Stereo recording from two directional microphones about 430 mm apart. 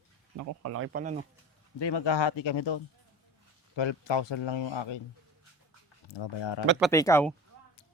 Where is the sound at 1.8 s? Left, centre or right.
Left.